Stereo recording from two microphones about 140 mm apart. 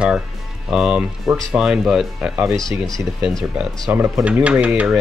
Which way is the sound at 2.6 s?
5° left (ahead or behind).